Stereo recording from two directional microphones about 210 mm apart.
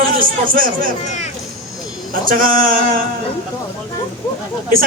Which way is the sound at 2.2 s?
40° right (ahead or behind).